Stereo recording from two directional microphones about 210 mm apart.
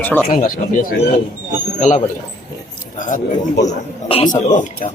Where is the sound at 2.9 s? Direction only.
35° left (ahead or behind).